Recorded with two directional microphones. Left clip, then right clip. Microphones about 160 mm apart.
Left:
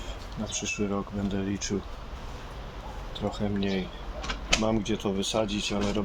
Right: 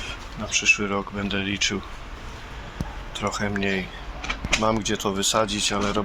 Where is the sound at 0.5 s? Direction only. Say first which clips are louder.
Right 11 dB; 15° left (ahead or behind).